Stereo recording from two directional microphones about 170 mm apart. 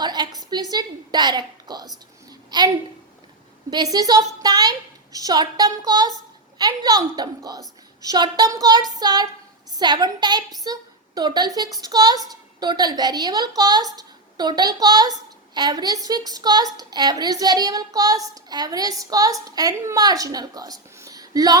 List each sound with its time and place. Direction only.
0.0 s a woman's voice: 25° right (ahead or behind)
3.9 s a woman's voice: 20° right (ahead or behind)